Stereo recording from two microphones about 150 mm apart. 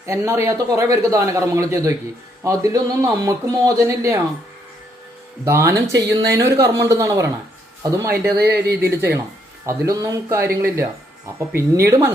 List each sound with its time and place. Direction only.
0.0 s a man's voice: 20° right (ahead or behind)
5.5 s a man's voice: 20° right (ahead or behind)
8.4 s speech: 90° right
9.0 s a man's voice: 15° right (ahead or behind)